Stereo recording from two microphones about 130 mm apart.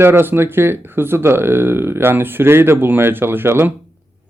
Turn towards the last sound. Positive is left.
turn(degrees=-15)  # may be behind; listen again after turning